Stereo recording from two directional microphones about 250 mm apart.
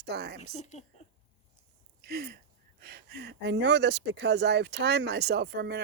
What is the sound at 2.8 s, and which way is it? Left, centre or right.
Speech, right.